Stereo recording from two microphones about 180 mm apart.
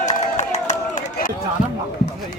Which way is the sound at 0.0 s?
40° left (ahead or behind).